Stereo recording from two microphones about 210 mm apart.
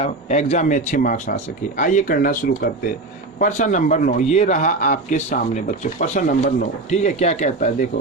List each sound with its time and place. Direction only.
0.0 s a man's voice: 30° left (ahead or behind)